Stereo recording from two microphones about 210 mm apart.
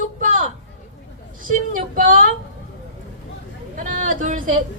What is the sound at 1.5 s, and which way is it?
Speech, 40° right (ahead or behind).